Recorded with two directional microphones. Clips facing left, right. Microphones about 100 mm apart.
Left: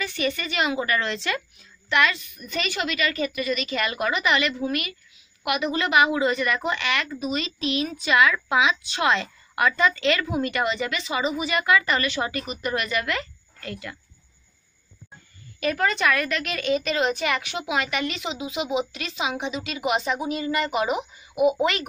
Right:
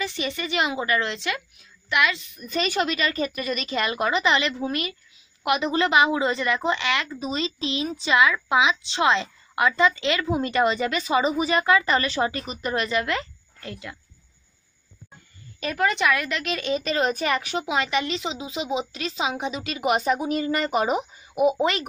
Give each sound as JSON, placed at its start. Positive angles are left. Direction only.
{"t": 0.0, "sound": "a woman's voice", "side_deg": -25}
{"t": 2.1, "sound": "a woman's voice", "side_deg": -30}
{"t": 15.6, "sound": "a woman's voice", "side_deg": -20}